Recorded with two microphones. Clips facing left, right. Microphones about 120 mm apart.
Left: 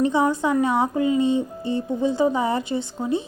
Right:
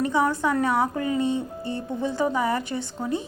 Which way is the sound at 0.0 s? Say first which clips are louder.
Left 3 dB; 20° left (ahead or behind).